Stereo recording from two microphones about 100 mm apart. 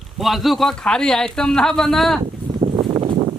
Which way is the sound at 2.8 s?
55° right (ahead or behind).